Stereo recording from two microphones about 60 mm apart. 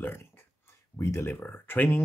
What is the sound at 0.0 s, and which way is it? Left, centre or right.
Speech, left.